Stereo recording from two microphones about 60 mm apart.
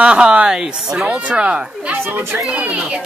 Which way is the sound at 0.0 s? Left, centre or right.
Centre.